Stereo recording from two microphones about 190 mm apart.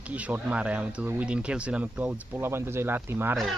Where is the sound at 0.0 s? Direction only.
5° right (ahead or behind).